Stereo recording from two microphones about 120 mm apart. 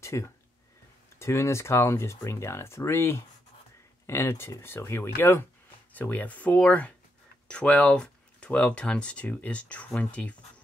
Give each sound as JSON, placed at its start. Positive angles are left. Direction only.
{"t": 0.0, "sound": "speech", "side_deg": 25}